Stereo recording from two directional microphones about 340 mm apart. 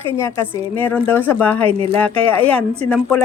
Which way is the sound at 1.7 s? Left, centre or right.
Centre.